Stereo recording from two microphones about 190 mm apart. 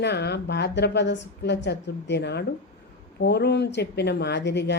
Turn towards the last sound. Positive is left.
turn(degrees=65)  # may be behind; listen again after turning